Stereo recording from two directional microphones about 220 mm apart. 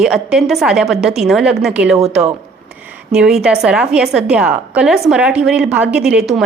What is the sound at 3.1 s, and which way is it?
A woman's voice, centre (ahead or behind).